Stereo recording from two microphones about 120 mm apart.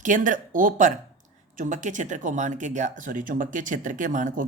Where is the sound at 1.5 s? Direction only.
90° right.